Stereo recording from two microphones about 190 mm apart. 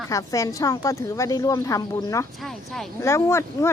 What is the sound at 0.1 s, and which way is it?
Speech, 15° left (ahead or behind).